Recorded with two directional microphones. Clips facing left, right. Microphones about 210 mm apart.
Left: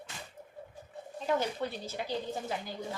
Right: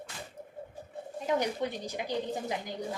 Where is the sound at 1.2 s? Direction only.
15° right (ahead or behind).